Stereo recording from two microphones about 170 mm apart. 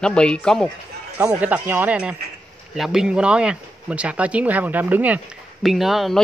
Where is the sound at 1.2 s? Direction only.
10° right (ahead or behind).